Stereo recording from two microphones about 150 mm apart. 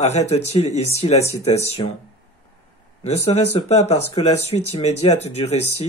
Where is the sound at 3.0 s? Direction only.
45° left (ahead or behind).